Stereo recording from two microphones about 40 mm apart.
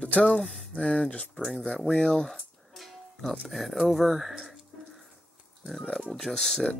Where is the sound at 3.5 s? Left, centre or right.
Centre.